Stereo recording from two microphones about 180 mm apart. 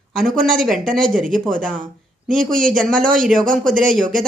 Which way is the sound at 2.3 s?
50° right (ahead or behind).